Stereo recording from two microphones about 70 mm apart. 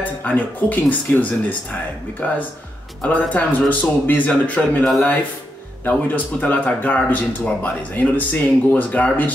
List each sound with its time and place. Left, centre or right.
0.0 s speech: left
5.9 s speech: left